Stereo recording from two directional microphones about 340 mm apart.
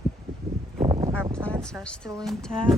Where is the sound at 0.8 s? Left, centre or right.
Centre.